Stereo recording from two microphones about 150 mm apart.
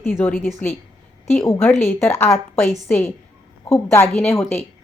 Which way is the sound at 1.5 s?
15° left (ahead or behind).